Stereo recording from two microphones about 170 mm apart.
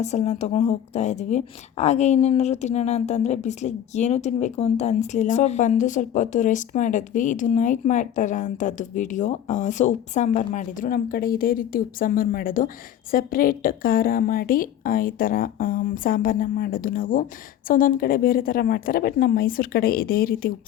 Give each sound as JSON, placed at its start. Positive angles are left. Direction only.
{"t": 0.0, "sound": "a woman's voice", "side_deg": 40}